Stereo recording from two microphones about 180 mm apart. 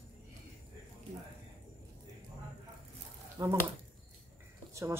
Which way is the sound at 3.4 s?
20° right (ahead or behind).